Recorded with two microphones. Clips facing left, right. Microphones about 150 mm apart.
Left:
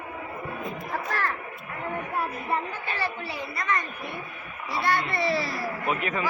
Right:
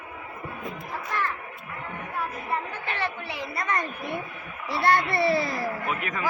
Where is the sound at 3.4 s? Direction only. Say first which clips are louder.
Even; 35° right (ahead or behind).